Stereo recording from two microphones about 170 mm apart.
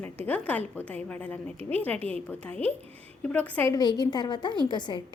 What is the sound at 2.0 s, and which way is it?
Speech, 35° right (ahead or behind).